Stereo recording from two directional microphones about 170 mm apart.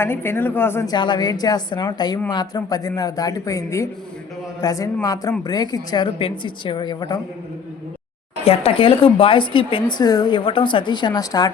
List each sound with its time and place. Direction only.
0.0 s a woman's voice: 15° left (ahead or behind)
0.9 s a woman's voice: 25° left (ahead or behind)
8.4 s a woman's voice: 35° left (ahead or behind)